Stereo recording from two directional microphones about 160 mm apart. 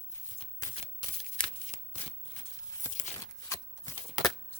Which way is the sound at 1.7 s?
45° left (ahead or behind).